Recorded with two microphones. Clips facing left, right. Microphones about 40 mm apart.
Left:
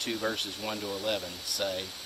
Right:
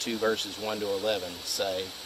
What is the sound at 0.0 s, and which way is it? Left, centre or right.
Speech, centre.